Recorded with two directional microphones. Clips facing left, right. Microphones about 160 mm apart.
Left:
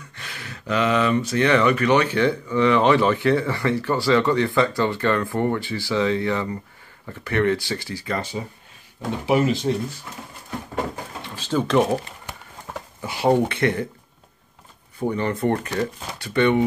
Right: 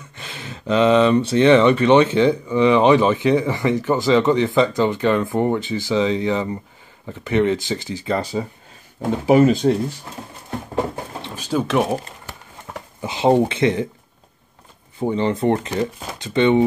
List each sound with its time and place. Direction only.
0.1 s speech: 20° right (ahead or behind)
8.2 s speech: 35° right (ahead or behind)
9.2 s speech: 45° right (ahead or behind)
10.8 s a sound: 25° right (ahead or behind)
11.4 s speech: 5° right (ahead or behind)
13.0 s speech: 20° right (ahead or behind)
15.0 s speech: 25° right (ahead or behind)